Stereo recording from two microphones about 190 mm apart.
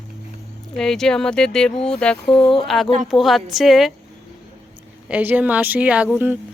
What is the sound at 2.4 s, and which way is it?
Speech, 25° left (ahead or behind).